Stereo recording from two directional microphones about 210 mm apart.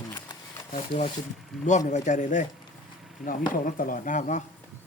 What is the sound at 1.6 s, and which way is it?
Speech, 35° left (ahead or behind).